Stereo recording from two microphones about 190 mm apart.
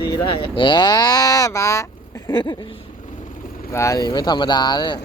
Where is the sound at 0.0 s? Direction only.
25° left (ahead or behind).